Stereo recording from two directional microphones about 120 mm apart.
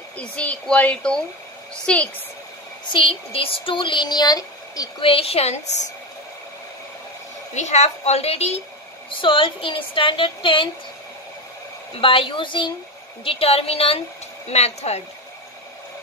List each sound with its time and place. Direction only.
0.2 s a child's voice: 10° left (ahead or behind)
2.9 s speech: 50° left (ahead or behind); by 4.8 s 30° left (ahead or behind)
5.0 s a woman's voice: 55° left (ahead or behind)
7.5 s a woman's voice: 70° left (ahead or behind)
9.2 s speech: 45° left (ahead or behind)
11.9 s a woman's voice: 45° left (ahead or behind); by 15.0 s 65° left (ahead or behind)